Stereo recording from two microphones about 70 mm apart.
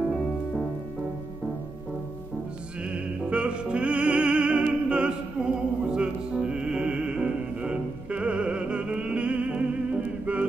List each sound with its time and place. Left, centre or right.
2.8 s opera: centre